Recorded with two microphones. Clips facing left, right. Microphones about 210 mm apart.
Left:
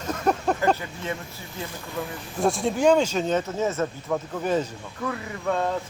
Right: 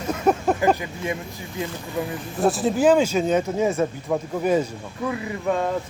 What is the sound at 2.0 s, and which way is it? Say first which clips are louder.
Speech: right 5 dB; 20° right (ahead or behind).